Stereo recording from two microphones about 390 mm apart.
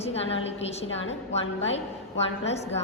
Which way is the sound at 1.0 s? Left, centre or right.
Left.